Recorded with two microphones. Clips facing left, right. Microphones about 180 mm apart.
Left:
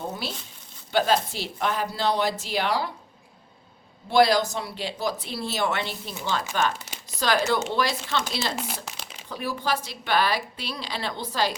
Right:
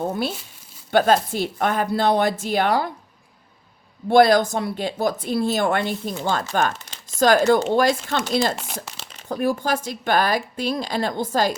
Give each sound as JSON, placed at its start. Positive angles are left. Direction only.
{"t": 0.1, "sound": "speech", "side_deg": -50}
{"t": 4.1, "sound": "speech", "side_deg": -50}
{"t": 6.8, "sound": "crumpling", "side_deg": 10}
{"t": 7.2, "sound": "speech", "side_deg": -45}